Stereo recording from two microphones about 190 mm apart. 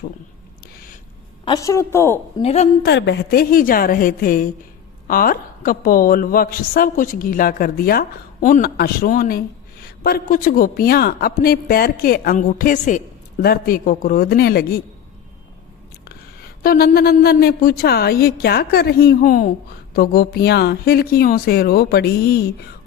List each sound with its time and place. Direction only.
1.5 s a woman's voice: 15° left (ahead or behind)
2.4 s a woman's voice: 35° left (ahead or behind)
2.8 s a woman's voice: 65° left (ahead or behind); by 13.0 s 40° left (ahead or behind)
13.4 s a woman's voice: 50° left (ahead or behind)
16.6 s a woman's voice: 55° left (ahead or behind)